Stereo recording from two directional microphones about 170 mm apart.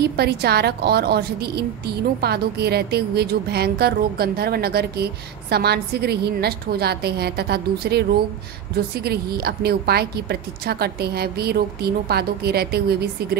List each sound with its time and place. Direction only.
0.0 s a woman's voice: 70° right (ahead or behind)